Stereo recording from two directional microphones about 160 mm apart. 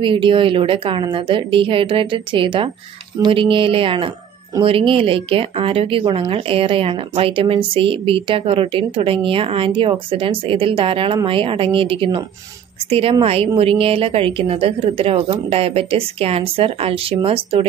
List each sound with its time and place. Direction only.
0.0 s speech: 30° right (ahead or behind)